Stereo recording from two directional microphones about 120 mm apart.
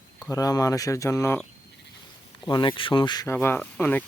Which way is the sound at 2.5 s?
40° left (ahead or behind).